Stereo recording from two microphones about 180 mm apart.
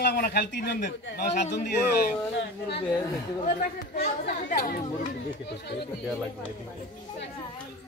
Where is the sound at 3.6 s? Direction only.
55° left (ahead or behind).